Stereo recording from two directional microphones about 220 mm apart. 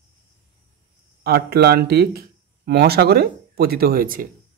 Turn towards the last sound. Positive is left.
turn(degrees=-40)  # may be behind; listen again after turning